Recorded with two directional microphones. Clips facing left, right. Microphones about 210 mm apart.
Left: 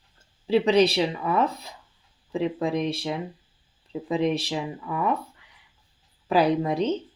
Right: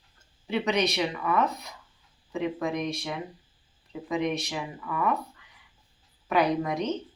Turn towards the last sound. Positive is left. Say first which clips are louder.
# left 4 dB
turn(degrees=30)  # may be behind; listen again after turning